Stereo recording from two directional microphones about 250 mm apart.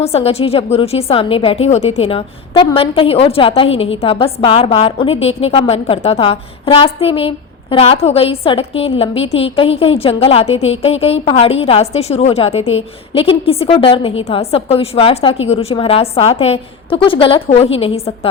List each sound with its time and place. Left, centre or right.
0.0 s a woman's voice: left